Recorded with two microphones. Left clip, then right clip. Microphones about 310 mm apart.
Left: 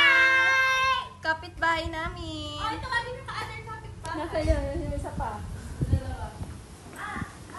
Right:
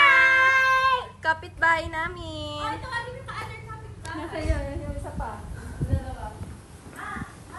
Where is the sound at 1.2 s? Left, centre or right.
Centre.